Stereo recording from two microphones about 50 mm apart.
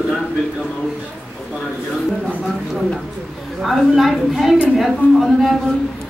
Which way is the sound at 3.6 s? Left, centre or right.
Centre.